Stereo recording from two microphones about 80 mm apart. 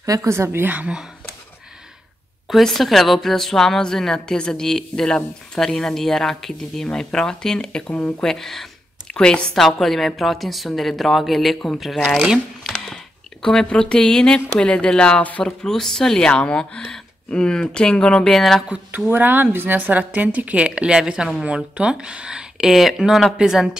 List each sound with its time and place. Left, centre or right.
0.0 s a woman's voice: right
2.4 s speech: centre
12.7 s a sound: centre
14.6 s speech: centre
15.6 s speech: centre
18.7 s a woman's voice: centre